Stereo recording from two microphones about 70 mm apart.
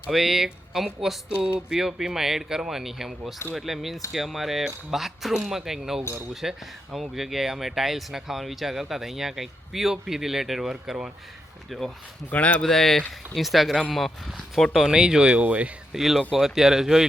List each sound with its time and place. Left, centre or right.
0.1 s speech: centre
12.3 s speech: left
12.6 s speech: centre
15.9 s speech: centre